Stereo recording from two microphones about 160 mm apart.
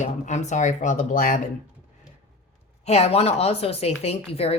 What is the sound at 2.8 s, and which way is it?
Speech, 40° left (ahead or behind).